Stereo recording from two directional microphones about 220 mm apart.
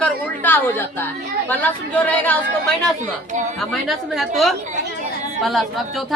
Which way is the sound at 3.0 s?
35° right (ahead or behind).